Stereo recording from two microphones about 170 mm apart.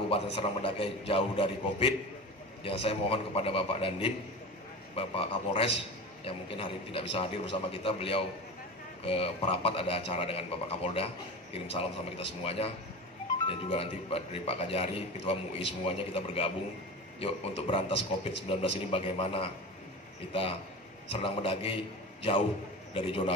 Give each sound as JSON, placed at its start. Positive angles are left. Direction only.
{"t": 0.1, "sound": "a man's voice", "side_deg": 35}
{"t": 21.1, "sound": "a man's voice", "side_deg": 30}